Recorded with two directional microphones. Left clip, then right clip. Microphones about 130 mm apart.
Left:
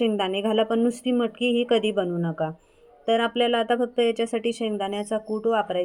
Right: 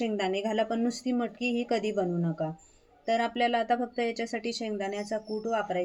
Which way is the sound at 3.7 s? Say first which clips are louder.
Left 6 dB; 25° left (ahead or behind).